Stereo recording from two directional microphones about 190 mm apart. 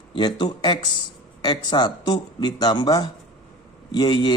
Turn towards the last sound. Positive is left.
turn(degrees=25)  # may be behind; listen again after turning